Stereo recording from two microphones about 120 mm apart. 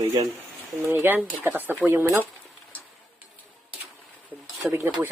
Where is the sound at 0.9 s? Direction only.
15° right (ahead or behind).